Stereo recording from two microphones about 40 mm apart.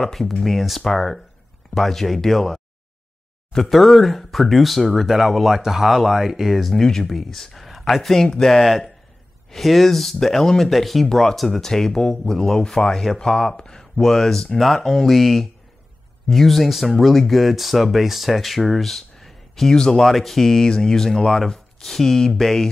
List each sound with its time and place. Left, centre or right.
0.0 s speech: centre
6.8 s speech: centre
8.6 s speech: centre
10.7 s speech: centre
19.7 s speech: centre
20.0 s speech: centre